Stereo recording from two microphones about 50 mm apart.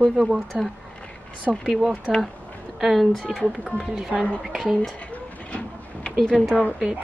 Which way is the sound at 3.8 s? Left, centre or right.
Centre.